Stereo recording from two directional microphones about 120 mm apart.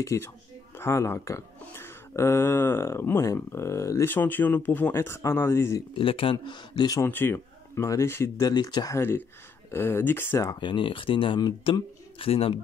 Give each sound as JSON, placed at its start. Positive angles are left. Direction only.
{"t": 0.0, "sound": "speech", "side_deg": 25}
{"t": 5.9, "sound": "speech", "side_deg": 50}
{"t": 7.0, "sound": "speech", "side_deg": 15}
{"t": 8.5, "sound": "speech", "side_deg": 35}
{"t": 9.7, "sound": "speech", "side_deg": 20}
{"t": 10.4, "sound": "speech", "side_deg": 35}